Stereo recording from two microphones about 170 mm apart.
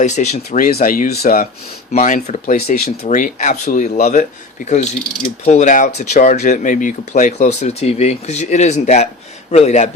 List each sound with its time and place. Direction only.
0.0 s speech: 45° left (ahead or behind); by 1.5 s 60° left (ahead or behind)
1.9 s speech: 50° left (ahead or behind)
2.6 s speech: 65° left (ahead or behind)
3.1 s speech: 45° left (ahead or behind)